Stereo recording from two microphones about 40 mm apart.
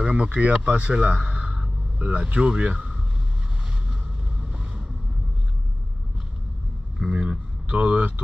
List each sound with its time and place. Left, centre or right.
0.0 s speech: right
3.9 s vehicle: right
7.1 s a sound: right
7.7 s speech: right